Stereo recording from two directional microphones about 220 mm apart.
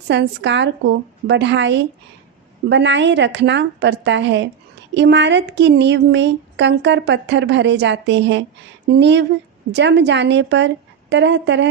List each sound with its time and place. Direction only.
0.1 s speech: 55° right (ahead or behind)